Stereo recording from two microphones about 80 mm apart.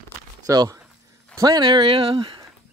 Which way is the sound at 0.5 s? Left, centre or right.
Right.